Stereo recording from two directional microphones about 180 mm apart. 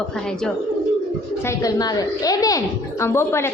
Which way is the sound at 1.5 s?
20° left (ahead or behind).